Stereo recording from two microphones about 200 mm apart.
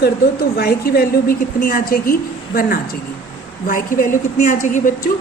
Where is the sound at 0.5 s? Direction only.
50° left (ahead or behind).